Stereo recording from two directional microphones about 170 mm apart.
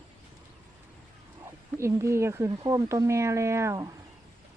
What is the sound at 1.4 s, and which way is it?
Speech, 15° right (ahead or behind).